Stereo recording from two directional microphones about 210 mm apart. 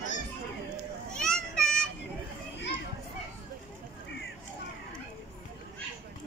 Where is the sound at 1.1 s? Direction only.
5° left (ahead or behind).